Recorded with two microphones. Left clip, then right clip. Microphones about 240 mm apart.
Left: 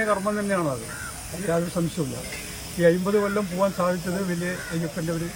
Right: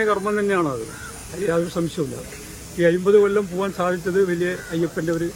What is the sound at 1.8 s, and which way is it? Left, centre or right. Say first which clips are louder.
Speech: right 3 dB; centre.